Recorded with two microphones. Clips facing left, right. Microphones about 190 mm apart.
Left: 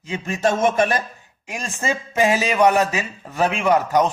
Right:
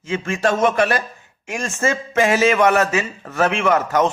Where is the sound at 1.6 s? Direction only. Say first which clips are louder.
Right 4 dB; 15° left (ahead or behind).